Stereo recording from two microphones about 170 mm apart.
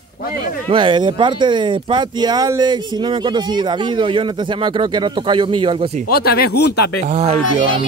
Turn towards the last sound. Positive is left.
turn(degrees=-40)  # may be behind; listen again after turning